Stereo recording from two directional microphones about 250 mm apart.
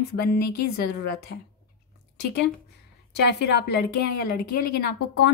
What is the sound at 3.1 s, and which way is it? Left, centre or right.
A woman's voice, left.